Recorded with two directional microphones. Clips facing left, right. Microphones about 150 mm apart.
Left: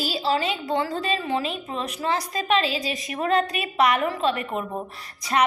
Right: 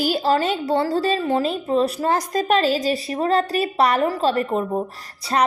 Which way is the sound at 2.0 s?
45° right (ahead or behind).